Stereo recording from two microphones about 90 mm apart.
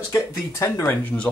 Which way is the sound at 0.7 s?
25° left (ahead or behind).